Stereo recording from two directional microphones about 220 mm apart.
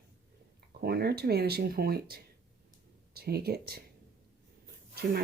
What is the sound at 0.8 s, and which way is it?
Speech, 45° right (ahead or behind).